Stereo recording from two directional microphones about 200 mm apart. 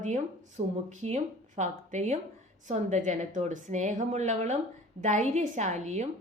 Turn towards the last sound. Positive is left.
turn(degrees=-35)  # may be behind; listen again after turning